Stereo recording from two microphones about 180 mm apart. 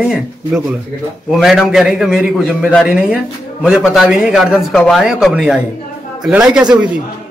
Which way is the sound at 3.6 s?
5° right (ahead or behind).